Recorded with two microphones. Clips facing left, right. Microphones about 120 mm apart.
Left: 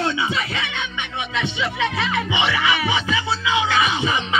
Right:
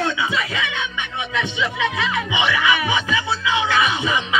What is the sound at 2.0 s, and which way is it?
Music, 35° left (ahead or behind).